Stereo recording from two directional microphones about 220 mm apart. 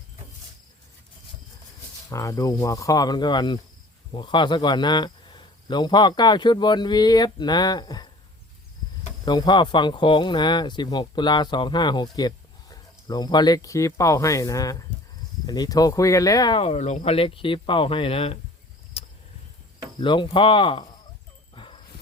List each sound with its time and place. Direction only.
2.0 s speech: 15° left (ahead or behind)
9.2 s speech: 20° left (ahead or behind)
19.0 s a sound: 25° left (ahead or behind)
20.0 s speech: 20° left (ahead or behind)
21.5 s dog: 20° left (ahead or behind)